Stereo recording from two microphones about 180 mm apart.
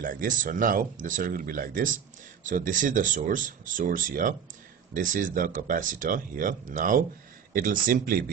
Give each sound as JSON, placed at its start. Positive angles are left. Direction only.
{"t": 0.0, "sound": "speech", "side_deg": -50}